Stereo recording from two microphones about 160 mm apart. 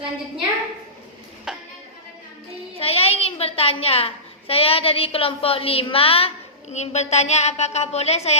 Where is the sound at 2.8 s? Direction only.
40° left (ahead or behind).